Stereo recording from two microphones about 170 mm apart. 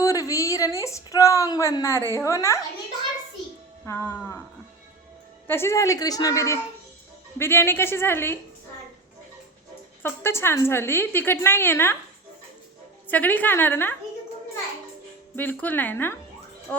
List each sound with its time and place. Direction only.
0.0 s a woman's voice: 20° left (ahead or behind)
3.8 s a woman's voice: 15° left (ahead or behind)
5.5 s a woman's voice: 15° left (ahead or behind)
10.0 s a woman's voice: 15° left (ahead or behind)
13.1 s a woman's voice: 10° left (ahead or behind)
15.4 s a woman's voice: 10° left (ahead or behind)